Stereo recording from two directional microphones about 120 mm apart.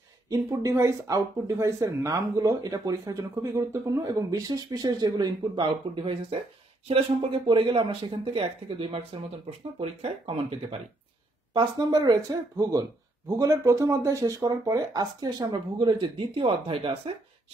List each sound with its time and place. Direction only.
0.3 s speech: 30° right (ahead or behind); by 10.8 s 55° right (ahead or behind)
11.5 s speech: 35° right (ahead or behind)